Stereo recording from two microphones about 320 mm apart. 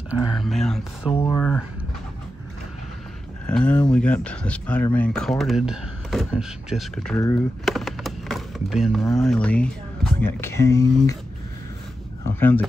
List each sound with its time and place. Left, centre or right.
0.1 s speech: centre
3.4 s speech: centre
12.4 s speech: centre